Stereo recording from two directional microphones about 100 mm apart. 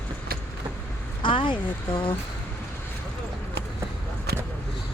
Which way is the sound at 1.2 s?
55° left (ahead or behind).